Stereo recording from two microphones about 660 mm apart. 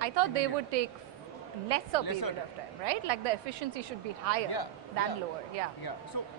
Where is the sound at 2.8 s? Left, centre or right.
Right.